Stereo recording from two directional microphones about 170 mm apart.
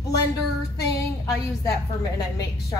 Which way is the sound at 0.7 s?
20° left (ahead or behind).